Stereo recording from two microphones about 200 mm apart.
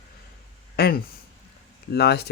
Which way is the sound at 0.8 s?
50° left (ahead or behind).